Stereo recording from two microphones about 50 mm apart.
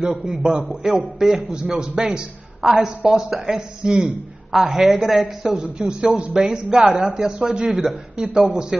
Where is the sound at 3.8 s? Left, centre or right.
Centre.